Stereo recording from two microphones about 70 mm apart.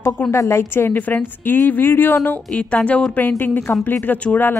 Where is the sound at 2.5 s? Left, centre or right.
Centre.